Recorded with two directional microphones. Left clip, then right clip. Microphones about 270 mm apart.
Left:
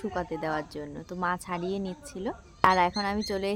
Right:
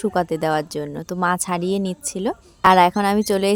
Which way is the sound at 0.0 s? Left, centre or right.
Right.